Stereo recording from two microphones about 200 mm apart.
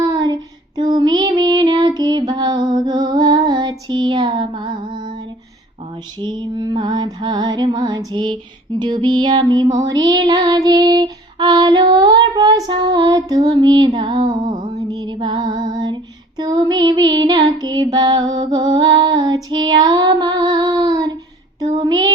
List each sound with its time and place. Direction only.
0.0 s child singing: 20° right (ahead or behind)
0.8 s music: 20° right (ahead or behind)
6.4 s child singing: 20° right (ahead or behind)
14.9 s music: 20° right (ahead or behind)
16.4 s child singing: 20° right (ahead or behind)